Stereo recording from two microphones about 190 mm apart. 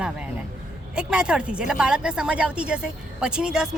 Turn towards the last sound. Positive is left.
turn(degrees=-5)  # may be behind; listen again after turning